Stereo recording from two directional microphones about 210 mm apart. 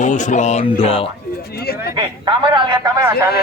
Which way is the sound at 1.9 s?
25° right (ahead or behind).